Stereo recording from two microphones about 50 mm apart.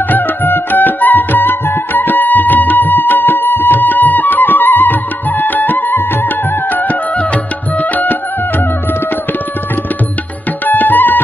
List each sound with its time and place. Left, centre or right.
0.1 s music: left
10.6 s music: left